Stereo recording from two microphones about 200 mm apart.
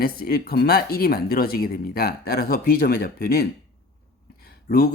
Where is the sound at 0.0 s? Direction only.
50° left (ahead or behind).